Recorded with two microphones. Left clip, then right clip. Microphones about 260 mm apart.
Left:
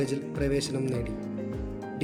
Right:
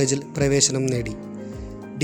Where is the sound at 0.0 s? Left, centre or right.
Right.